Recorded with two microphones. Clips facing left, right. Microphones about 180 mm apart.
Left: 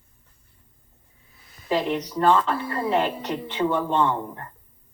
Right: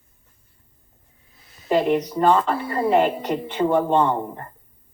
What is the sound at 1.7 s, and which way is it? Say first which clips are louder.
Speech: right 5 dB; 50° right (ahead or behind).